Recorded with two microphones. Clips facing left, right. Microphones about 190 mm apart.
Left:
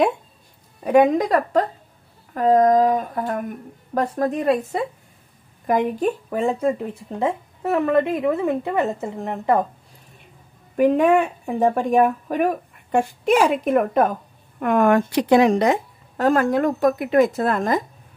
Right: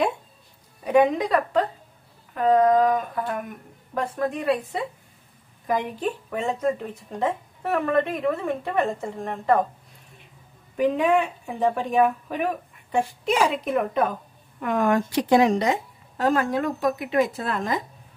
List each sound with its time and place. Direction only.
0.8 s a woman's voice: 50° left (ahead or behind)
7.2 s a woman's voice: 25° left (ahead or behind)
10.8 s a woman's voice: 50° left (ahead or behind)